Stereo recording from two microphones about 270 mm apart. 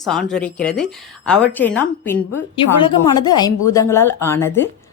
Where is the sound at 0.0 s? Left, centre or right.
Centre.